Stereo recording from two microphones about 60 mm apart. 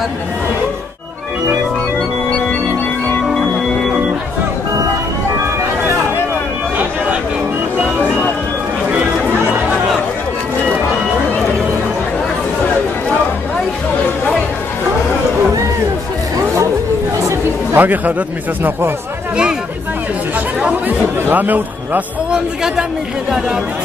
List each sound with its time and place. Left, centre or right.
17.7 s a man's voice: right
21.3 s a man's voice: right
22.3 s speech: centre